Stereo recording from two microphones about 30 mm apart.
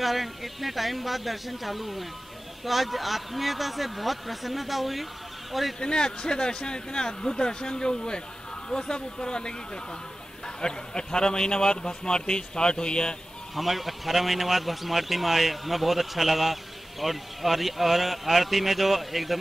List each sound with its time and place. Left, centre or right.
0.0 s a man's voice: centre
5.8 s a man's voice: left
10.6 s a man's voice: left
13.6 s a man's voice: centre